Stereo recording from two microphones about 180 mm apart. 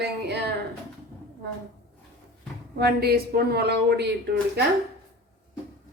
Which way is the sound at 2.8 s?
60° right (ahead or behind).